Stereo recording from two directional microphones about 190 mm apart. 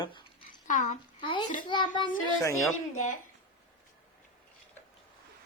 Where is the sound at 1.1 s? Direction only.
25° left (ahead or behind).